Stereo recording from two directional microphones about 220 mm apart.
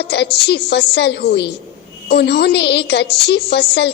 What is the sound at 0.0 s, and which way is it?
A woman's voice, 50° left (ahead or behind).